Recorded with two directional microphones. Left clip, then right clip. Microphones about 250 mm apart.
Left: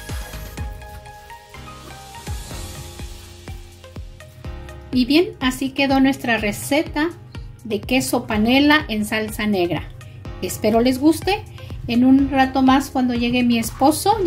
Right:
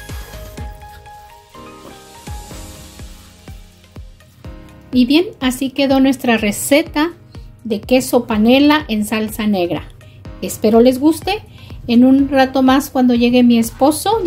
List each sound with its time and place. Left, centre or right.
0.6 s music: centre
4.9 s a woman's voice: centre